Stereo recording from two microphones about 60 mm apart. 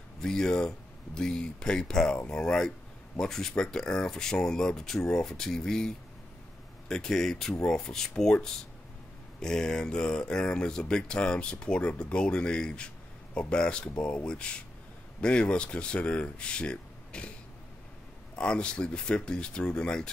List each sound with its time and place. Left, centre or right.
0.2 s speech: centre
18.3 s speech: centre